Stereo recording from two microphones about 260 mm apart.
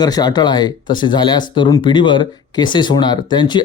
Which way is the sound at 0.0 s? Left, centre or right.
Centre.